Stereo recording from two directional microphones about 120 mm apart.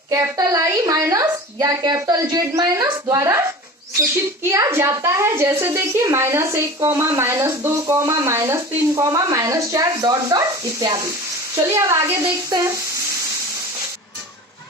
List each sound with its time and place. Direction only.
0.1 s a woman's voice: 25° right (ahead or behind)
4.4 s a woman's voice: 20° right (ahead or behind)